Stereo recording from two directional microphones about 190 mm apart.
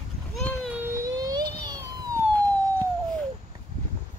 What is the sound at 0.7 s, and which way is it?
Baby cry, 10° right (ahead or behind).